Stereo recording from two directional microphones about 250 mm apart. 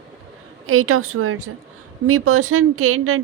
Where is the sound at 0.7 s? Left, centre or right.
Right.